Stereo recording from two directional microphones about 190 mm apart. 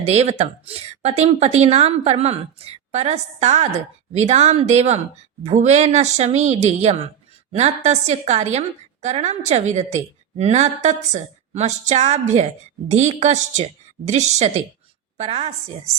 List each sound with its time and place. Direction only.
0.0 s a woman's voice: 35° right (ahead or behind)